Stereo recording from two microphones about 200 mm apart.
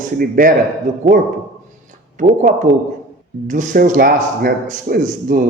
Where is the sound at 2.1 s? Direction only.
40° right (ahead or behind).